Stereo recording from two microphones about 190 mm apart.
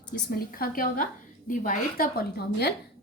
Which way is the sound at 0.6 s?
45° left (ahead or behind).